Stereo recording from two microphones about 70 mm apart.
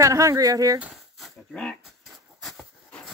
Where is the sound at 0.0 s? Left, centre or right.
Right.